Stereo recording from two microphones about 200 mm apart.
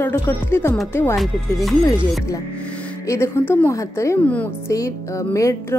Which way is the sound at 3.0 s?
15° left (ahead or behind).